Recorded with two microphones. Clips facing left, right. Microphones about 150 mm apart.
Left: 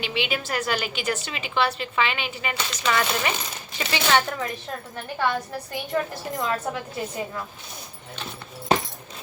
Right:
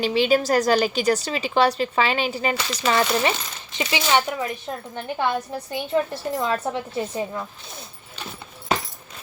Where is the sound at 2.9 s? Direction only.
30° right (ahead or behind).